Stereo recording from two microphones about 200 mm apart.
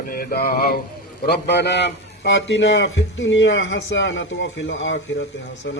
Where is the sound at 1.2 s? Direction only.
55° left (ahead or behind).